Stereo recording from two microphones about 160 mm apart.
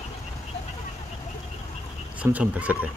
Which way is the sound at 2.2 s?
10° right (ahead or behind).